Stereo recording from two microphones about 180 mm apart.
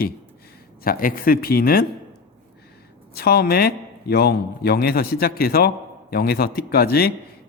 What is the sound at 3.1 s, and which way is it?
A man's voice, 60° left (ahead or behind).